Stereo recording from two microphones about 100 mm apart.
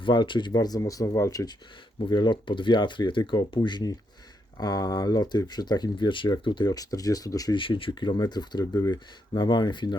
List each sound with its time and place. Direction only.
0.0 s speech: 50° left (ahead or behind); by 1.5 s 35° left (ahead or behind)
2.0 s speech: 50° left (ahead or behind)
6.7 s speech: 35° left (ahead or behind)
7.5 s speech: 60° left (ahead or behind)